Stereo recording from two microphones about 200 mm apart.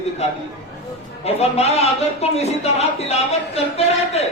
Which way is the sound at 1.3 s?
30° left (ahead or behind).